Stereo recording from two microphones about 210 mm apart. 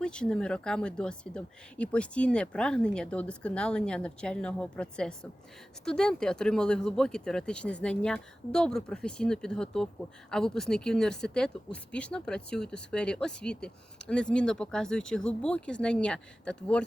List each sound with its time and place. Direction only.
0.0 s speech: 5° left (ahead or behind)